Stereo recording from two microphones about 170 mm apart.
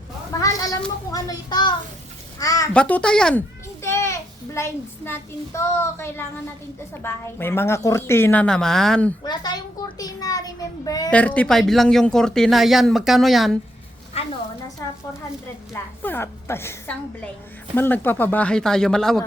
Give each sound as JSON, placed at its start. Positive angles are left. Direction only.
{"t": 0.3, "sound": "a sound", "side_deg": 20}
{"t": 1.1, "sound": "a child's voice", "side_deg": 25}
{"t": 2.7, "sound": "speech", "side_deg": 5}
{"t": 3.8, "sound": "a child's voice", "side_deg": 15}
{"t": 9.2, "sound": "a child's voice", "side_deg": 25}
{"t": 11.1, "sound": "speech", "side_deg": 10}
{"t": 14.2, "sound": "a sound", "side_deg": 35}
{"t": 15.7, "sound": "a woman's voice", "side_deg": 15}